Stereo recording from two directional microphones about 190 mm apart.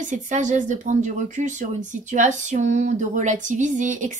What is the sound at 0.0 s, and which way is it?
A woman's voice, 40° right (ahead or behind).